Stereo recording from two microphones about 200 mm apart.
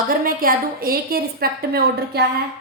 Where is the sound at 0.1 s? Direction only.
45° right (ahead or behind).